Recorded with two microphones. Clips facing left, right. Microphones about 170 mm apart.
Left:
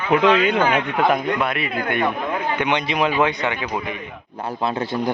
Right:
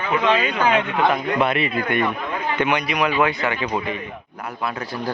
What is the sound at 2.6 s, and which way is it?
Speech, 20° left (ahead or behind).